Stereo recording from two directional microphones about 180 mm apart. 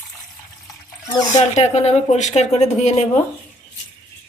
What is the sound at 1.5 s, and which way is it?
Speech, 40° left (ahead or behind).